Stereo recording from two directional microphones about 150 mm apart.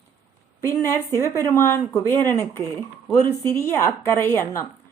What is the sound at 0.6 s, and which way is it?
Speech, 20° left (ahead or behind).